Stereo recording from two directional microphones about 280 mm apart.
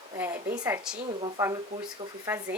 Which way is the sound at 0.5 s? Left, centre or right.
Centre.